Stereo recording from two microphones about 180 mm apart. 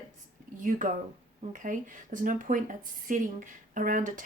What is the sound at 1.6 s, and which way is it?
Speech, 45° right (ahead or behind).